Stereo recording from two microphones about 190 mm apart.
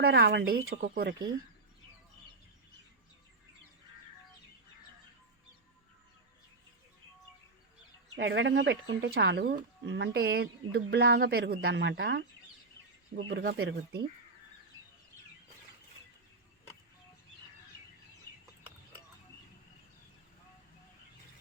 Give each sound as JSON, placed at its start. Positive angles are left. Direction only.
{"t": 0.0, "sound": "speech", "side_deg": -60}
{"t": 8.1, "sound": "speech", "side_deg": -75}
{"t": 13.3, "sound": "speech", "side_deg": -55}